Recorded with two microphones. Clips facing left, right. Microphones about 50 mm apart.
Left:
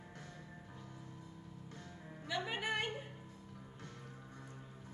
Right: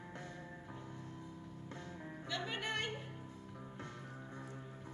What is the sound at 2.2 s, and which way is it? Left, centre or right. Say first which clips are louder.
Music: left 2 dB; centre.